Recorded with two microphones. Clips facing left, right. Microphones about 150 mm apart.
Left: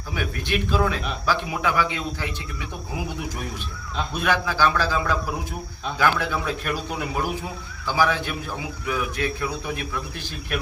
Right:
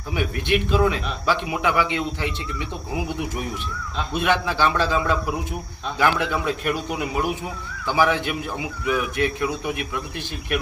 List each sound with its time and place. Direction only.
0.2 s a man's voice: 20° right (ahead or behind)
4.1 s a man's voice: 20° right (ahead or behind)